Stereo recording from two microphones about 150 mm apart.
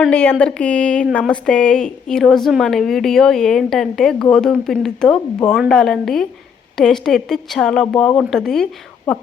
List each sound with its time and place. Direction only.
0.1 s a woman's voice: 10° left (ahead or behind)